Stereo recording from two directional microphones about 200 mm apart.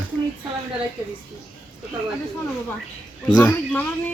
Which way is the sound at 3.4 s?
10° left (ahead or behind).